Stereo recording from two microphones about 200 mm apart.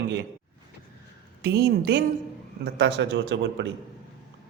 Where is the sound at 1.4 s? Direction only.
55° right (ahead or behind).